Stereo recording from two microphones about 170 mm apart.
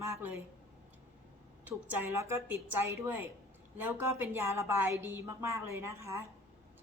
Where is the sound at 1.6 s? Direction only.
10° right (ahead or behind).